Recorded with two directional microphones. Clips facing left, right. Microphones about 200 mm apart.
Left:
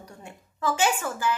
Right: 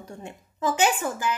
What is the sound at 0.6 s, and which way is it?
Speech, 20° right (ahead or behind).